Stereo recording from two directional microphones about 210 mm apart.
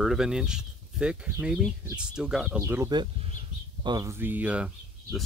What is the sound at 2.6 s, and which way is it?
Speech, 15° right (ahead or behind).